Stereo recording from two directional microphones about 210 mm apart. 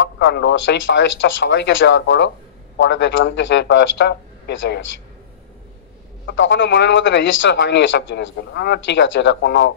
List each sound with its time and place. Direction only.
0.0 s a man's voice: 55° left (ahead or behind)
6.2 s a man's voice: 60° left (ahead or behind)